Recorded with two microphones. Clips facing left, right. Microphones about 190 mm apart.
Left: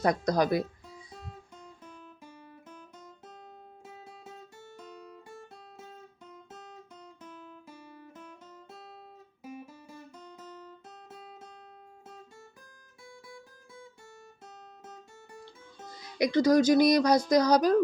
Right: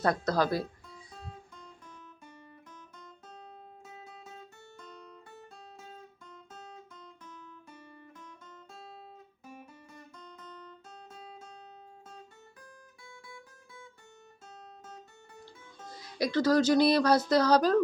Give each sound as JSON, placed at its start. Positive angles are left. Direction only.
{"t": 0.0, "sound": "speech", "side_deg": 15}
{"t": 10.3, "sound": "guitar", "side_deg": 10}
{"t": 16.1, "sound": "speech", "side_deg": 15}